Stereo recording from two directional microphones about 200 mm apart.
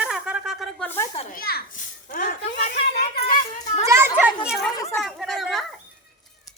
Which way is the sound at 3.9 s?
10° right (ahead or behind).